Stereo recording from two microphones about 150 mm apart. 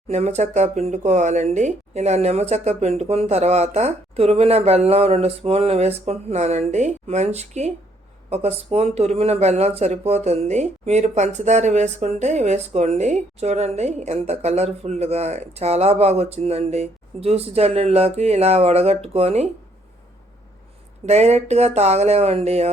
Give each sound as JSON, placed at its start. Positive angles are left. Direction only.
{"t": 0.1, "sound": "speech", "side_deg": -50}
{"t": 21.1, "sound": "speech", "side_deg": -45}